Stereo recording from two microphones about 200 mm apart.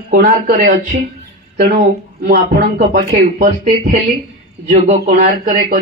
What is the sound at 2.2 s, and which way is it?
Speech, 50° right (ahead or behind).